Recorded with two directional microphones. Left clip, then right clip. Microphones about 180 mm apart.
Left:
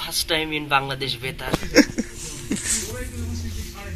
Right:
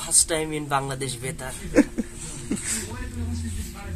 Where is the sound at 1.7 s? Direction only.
Centre (ahead or behind).